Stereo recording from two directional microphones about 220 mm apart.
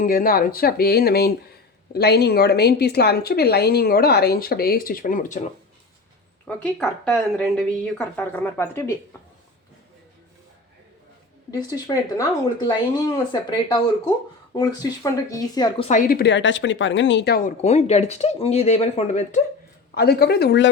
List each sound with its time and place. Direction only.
0.0 s a woman's voice: 40° left (ahead or behind)
6.5 s speech: 5° left (ahead or behind)
11.9 s speech: 15° left (ahead or behind)
15.9 s speech: 40° left (ahead or behind)
19.9 s a woman's voice: 45° left (ahead or behind)